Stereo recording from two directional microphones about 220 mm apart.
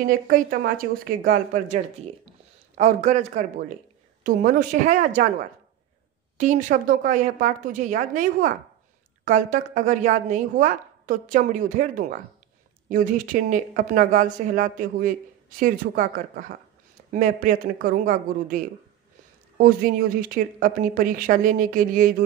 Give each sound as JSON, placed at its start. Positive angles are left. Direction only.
{"t": 0.0, "sound": "speech", "side_deg": -40}
{"t": 2.8, "sound": "speech", "side_deg": -30}
{"t": 6.3, "sound": "speech", "side_deg": -35}